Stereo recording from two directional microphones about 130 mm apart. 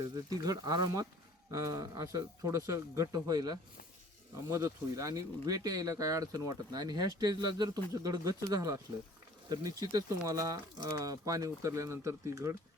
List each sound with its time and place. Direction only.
0.0 s speech: 30° right (ahead or behind)